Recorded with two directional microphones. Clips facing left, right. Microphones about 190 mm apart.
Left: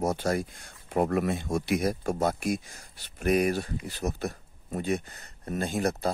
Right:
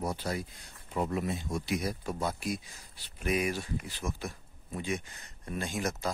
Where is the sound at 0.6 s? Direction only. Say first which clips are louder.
Left 7 dB; 65° left (ahead or behind).